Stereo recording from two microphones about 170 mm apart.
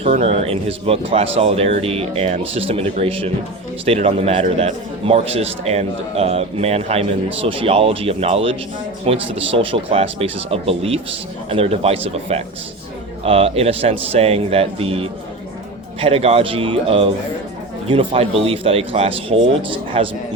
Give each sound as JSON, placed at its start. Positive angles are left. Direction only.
{"t": 0.0, "sound": "a man's voice", "side_deg": -35}